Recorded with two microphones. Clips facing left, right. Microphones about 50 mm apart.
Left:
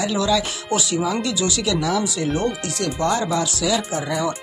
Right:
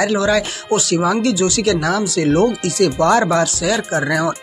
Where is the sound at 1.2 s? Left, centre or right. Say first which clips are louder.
Right 6 dB; right.